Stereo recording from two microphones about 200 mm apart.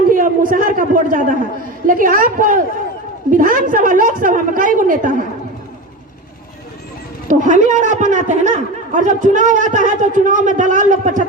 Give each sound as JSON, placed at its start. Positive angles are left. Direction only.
{"t": 0.1, "sound": "a sound", "side_deg": -40}
{"t": 1.9, "sound": "a woman's voice", "side_deg": -45}
{"t": 7.3, "sound": "a man's voice", "side_deg": -40}